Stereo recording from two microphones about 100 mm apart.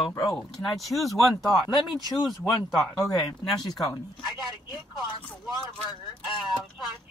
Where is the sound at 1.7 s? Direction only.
45° left (ahead or behind).